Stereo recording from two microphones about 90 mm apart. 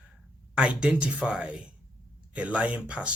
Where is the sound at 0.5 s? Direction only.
10° right (ahead or behind).